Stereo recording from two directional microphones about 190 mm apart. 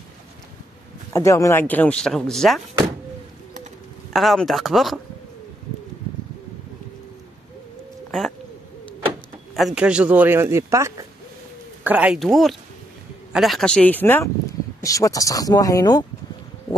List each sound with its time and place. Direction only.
1.1 s speech: 15° left (ahead or behind)
4.1 s speech: centre (ahead or behind)
9.5 s speech: centre (ahead or behind); by 16.1 s 20° left (ahead or behind)